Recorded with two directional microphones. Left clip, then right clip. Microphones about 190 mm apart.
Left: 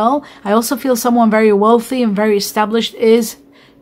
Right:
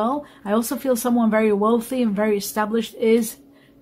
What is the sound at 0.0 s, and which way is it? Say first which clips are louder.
Speech: left 9 dB; 25° left (ahead or behind).